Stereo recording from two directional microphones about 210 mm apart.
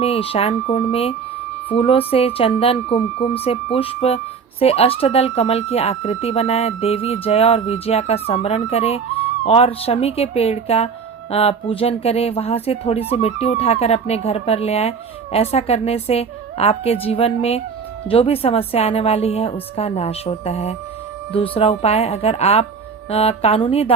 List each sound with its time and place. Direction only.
0.0 s speech: 30° left (ahead or behind)